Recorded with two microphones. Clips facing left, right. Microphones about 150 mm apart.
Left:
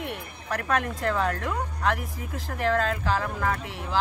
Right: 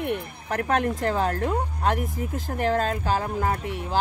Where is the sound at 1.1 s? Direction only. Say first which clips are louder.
Left 1 dB; 30° right (ahead or behind).